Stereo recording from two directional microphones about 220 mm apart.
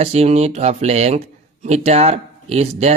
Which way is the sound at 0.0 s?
30° right (ahead or behind).